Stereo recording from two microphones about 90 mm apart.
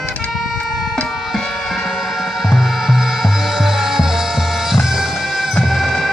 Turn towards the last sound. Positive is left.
turn(degrees=0)  # may be behind; listen again after turning